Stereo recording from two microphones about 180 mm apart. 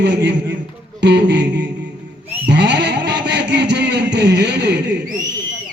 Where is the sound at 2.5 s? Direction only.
70° right (ahead or behind).